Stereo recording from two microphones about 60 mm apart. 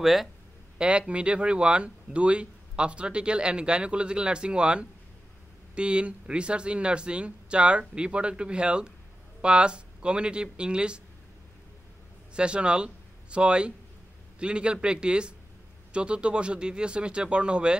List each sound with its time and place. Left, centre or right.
0.0 s speech: centre
0.7 s speech: centre
12.4 s speech: centre